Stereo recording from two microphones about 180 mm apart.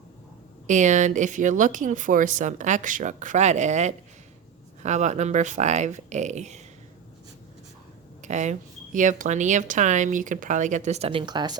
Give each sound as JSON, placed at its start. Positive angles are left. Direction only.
{"t": 0.7, "sound": "speech", "side_deg": -40}
{"t": 8.2, "sound": "speech", "side_deg": -40}